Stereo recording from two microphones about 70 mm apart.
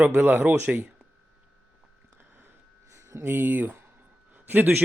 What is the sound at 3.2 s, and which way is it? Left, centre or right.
A man's voice, right.